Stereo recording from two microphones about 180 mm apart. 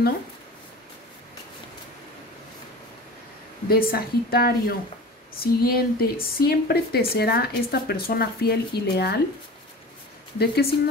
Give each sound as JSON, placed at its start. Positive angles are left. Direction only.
{"t": 3.6, "sound": "speech", "side_deg": 55}
{"t": 10.4, "sound": "speech", "side_deg": 60}